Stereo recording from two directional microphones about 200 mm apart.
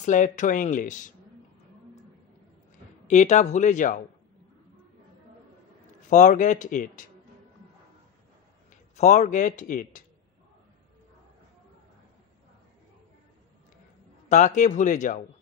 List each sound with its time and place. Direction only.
0.0 s speech: 40° left (ahead or behind)
3.1 s speech: 35° left (ahead or behind)
6.0 s speech: 40° left (ahead or behind)
8.9 s speech: 35° left (ahead or behind)
14.3 s speech: 35° left (ahead or behind)